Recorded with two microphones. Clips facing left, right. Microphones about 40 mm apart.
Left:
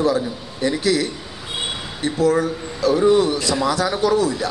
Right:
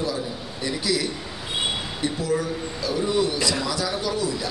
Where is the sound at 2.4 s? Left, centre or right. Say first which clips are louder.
Left 6 dB; left.